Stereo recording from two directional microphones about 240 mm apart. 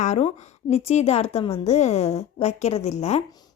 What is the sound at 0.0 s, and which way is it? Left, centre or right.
A woman's voice, left.